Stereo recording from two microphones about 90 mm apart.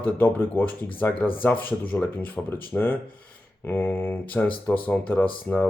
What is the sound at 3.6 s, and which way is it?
Speech, 25° left (ahead or behind).